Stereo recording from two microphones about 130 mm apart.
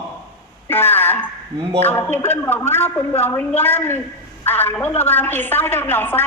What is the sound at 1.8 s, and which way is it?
A woman's voice, 15° left (ahead or behind).